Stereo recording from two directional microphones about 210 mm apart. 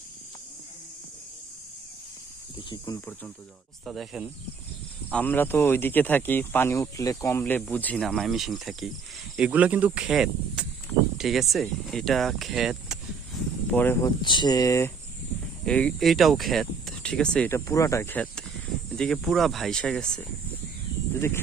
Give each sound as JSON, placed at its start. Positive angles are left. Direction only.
{"t": 2.6, "sound": "speech", "side_deg": 20}
{"t": 3.8, "sound": "speech", "side_deg": 0}
{"t": 5.1, "sound": "speech", "side_deg": 10}
{"t": 13.7, "sound": "speech", "side_deg": 10}
{"t": 14.2, "sound": "speech", "side_deg": 20}
{"t": 15.6, "sound": "speech", "side_deg": 5}